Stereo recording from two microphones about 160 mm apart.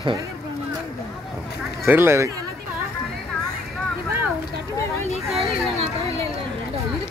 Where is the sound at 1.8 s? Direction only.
15° right (ahead or behind).